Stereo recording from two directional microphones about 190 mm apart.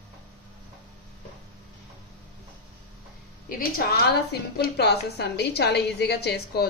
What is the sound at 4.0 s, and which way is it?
A woman's voice, 55° left (ahead or behind).